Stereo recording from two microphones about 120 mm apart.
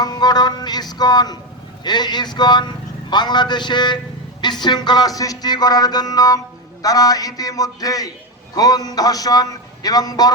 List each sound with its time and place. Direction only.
0.0 s a man's voice: 35° left (ahead or behind)